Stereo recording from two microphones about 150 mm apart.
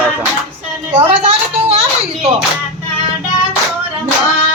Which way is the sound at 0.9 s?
45° right (ahead or behind).